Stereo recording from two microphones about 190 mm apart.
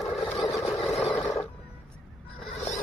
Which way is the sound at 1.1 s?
15° left (ahead or behind).